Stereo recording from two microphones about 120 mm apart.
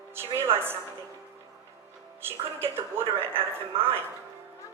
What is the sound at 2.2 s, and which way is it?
A woman's voice, 20° right (ahead or behind).